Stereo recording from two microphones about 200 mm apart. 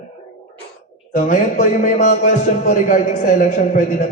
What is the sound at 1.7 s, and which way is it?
A man's voice, 40° left (ahead or behind).